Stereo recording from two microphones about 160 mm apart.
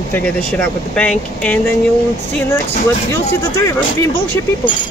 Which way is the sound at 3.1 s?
15° left (ahead or behind).